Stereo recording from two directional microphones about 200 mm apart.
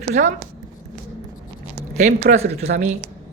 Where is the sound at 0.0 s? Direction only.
40° right (ahead or behind).